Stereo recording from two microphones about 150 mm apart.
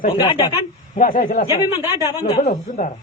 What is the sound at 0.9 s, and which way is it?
Speech, 70° left (ahead or behind).